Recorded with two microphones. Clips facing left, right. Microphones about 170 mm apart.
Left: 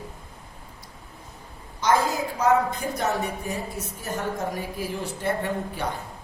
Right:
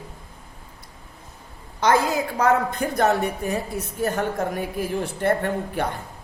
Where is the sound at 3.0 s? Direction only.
60° right (ahead or behind).